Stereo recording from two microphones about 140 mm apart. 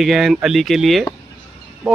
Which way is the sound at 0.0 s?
Centre (ahead or behind).